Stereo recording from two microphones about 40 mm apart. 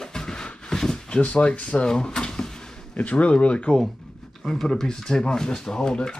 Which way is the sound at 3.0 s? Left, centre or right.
Left.